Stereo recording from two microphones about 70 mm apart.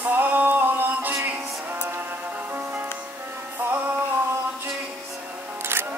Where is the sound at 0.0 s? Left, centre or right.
Right.